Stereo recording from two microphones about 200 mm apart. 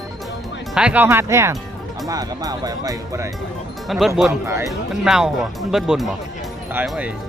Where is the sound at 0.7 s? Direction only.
5° right (ahead or behind).